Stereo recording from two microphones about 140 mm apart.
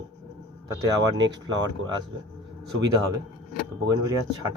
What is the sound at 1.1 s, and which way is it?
Speech, 30° right (ahead or behind).